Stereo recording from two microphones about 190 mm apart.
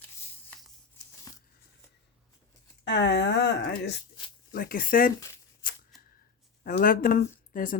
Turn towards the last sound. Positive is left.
turn(degrees=50)  # may be behind; listen again after turning